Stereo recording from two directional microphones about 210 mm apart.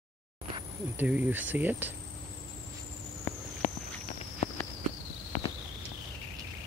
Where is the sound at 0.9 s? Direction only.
10° right (ahead or behind).